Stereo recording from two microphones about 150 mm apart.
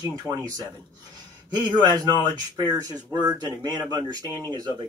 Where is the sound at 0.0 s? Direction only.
30° right (ahead or behind).